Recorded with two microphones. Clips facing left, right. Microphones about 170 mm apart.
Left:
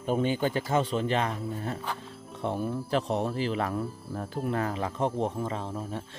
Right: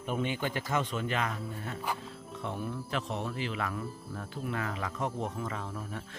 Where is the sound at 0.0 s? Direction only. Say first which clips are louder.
Left 6 dB; 35° left (ahead or behind).